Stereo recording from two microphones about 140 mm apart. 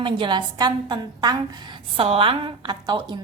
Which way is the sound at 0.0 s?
35° right (ahead or behind).